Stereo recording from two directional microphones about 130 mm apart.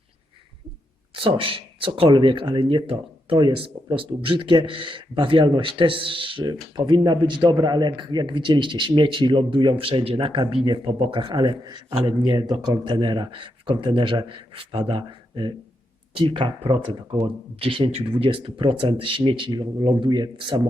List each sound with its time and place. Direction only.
1.1 s speech: 45° right (ahead or behind)